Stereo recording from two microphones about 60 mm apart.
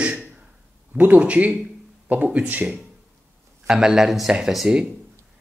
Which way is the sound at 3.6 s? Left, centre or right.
Centre.